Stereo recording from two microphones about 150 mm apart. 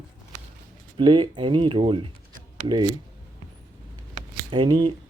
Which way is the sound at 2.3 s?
65° right (ahead or behind).